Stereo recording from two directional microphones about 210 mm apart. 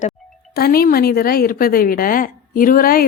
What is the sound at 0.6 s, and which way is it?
A woman's voice, 45° left (ahead or behind).